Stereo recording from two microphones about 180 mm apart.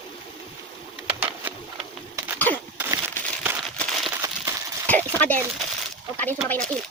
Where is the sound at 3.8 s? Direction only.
Centre (ahead or behind).